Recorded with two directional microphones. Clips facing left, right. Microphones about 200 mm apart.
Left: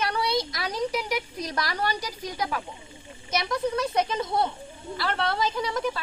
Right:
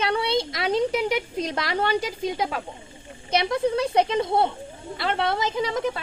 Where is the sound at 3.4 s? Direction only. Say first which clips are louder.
Right 3 dB; 30° right (ahead or behind).